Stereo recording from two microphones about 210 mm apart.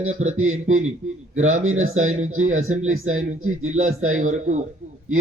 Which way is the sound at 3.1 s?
80° right.